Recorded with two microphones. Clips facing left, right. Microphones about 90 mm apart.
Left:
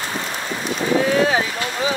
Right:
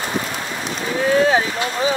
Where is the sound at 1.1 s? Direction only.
35° right (ahead or behind).